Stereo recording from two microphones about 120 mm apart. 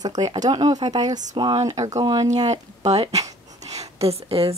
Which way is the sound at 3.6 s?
65° right (ahead or behind).